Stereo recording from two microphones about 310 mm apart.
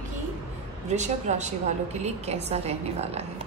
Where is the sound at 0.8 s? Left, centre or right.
Right.